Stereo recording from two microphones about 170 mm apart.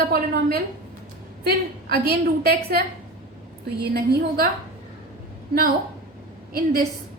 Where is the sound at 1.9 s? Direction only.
65° right (ahead or behind).